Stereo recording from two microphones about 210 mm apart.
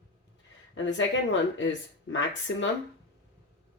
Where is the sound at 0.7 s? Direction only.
60° left (ahead or behind).